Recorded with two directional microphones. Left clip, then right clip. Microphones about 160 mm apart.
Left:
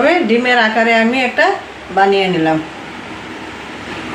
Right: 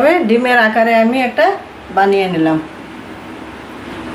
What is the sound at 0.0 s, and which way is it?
Speech, 30° right (ahead or behind).